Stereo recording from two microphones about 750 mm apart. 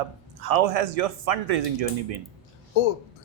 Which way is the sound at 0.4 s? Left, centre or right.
Right.